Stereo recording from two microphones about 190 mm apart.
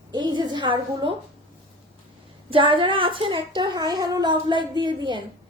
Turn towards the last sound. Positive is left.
turn(degrees=-25)  # may be behind; listen again after turning